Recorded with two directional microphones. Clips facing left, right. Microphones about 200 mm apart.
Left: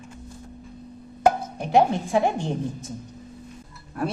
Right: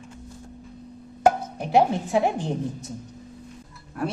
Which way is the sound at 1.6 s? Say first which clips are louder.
Left 1 dB; 5° right (ahead or behind).